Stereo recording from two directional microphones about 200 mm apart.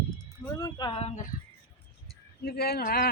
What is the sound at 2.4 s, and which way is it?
Speech, 50° left (ahead or behind).